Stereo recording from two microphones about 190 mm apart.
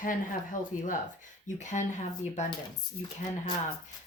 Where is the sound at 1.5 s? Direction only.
40° left (ahead or behind).